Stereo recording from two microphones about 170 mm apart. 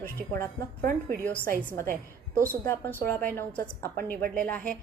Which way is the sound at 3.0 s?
10° left (ahead or behind).